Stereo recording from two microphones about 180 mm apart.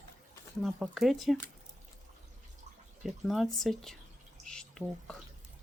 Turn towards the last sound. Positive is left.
turn(degrees=5)  # may be behind; listen again after turning